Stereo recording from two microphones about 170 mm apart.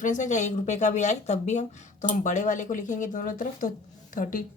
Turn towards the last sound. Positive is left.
turn(degrees=55)  # may be behind; listen again after turning